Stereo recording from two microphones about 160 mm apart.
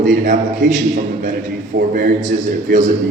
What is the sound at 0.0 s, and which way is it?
A man's voice, 50° right (ahead or behind).